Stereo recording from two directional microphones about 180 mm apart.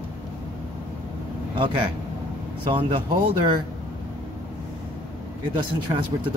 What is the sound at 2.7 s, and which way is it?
Speech, 30° right (ahead or behind).